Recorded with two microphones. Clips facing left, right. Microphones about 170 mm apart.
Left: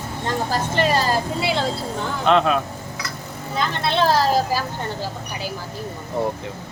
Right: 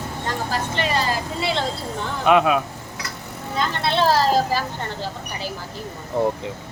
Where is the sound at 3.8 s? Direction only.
Centre (ahead or behind).